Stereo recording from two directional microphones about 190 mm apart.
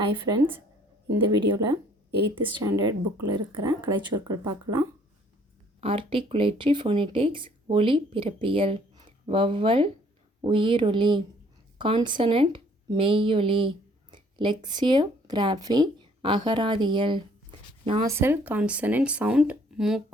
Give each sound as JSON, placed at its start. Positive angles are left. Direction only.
{"t": 0.0, "sound": "a woman's voice", "side_deg": -25}
{"t": 18.0, "sound": "speech", "side_deg": -15}